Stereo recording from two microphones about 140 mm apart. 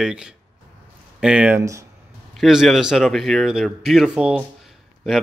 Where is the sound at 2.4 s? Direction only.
Centre (ahead or behind).